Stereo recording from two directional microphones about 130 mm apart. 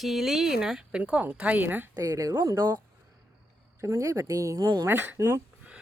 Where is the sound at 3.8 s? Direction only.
20° right (ahead or behind).